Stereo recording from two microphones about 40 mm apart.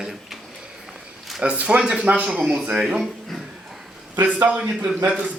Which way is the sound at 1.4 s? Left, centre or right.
Right.